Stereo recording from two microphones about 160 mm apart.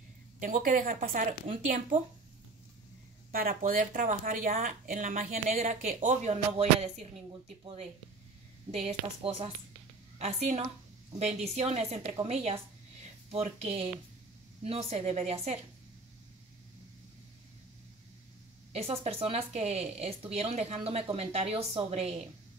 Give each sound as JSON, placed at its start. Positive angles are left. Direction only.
{"t": 0.4, "sound": "speech", "side_deg": -55}
{"t": 3.3, "sound": "a woman's voice", "side_deg": -60}
{"t": 18.7, "sound": "speech", "side_deg": -40}